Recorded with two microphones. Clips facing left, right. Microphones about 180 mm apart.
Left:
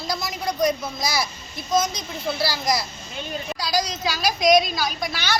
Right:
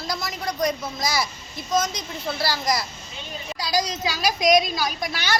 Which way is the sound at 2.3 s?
5° left (ahead or behind).